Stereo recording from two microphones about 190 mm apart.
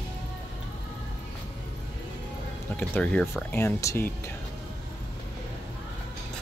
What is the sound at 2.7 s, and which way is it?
Speech, 5° left (ahead or behind).